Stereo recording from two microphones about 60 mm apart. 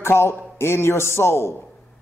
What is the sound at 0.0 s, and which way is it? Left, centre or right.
A man's voice, left.